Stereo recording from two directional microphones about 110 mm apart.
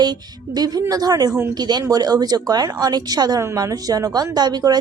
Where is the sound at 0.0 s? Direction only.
35° right (ahead or behind).